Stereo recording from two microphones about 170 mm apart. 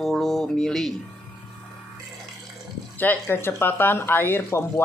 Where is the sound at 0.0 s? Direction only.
Centre (ahead or behind).